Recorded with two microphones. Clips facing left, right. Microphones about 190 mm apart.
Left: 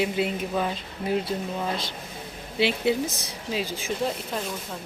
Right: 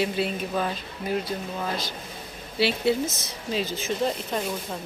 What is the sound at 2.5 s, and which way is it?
Speech, 15° left (ahead or behind).